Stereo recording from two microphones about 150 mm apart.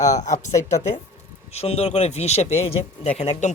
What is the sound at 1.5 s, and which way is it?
Speech, 45° left (ahead or behind).